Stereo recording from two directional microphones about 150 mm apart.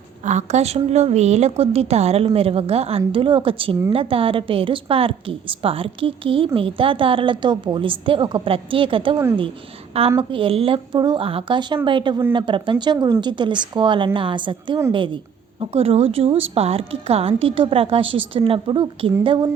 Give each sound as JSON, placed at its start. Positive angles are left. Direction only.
{"t": 0.3, "sound": "a woman's voice", "side_deg": -50}
{"t": 10.2, "sound": "a woman's voice", "side_deg": -35}